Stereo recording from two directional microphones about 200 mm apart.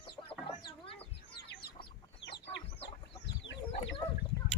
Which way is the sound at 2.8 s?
60° left (ahead or behind).